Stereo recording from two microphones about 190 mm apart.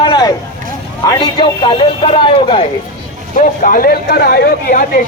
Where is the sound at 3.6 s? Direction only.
45° left (ahead or behind).